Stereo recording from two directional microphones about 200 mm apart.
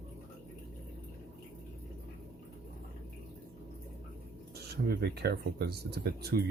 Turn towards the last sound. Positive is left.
turn(degrees=-50)  # may be behind; listen again after turning